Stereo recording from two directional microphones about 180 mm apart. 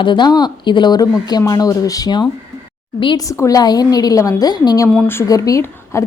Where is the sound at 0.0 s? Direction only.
25° left (ahead or behind).